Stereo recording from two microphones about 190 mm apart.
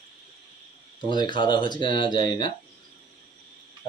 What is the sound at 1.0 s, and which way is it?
Speech, 25° left (ahead or behind).